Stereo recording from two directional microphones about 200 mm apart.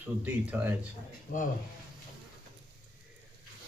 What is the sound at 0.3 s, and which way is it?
Speech, 10° right (ahead or behind).